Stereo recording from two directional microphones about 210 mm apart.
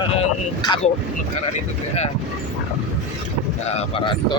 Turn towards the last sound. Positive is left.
turn(degrees=25)  # may be behind; listen again after turning